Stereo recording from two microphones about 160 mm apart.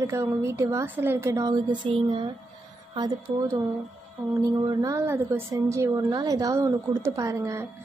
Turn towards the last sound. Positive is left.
turn(degrees=-20)  # may be behind; listen again after turning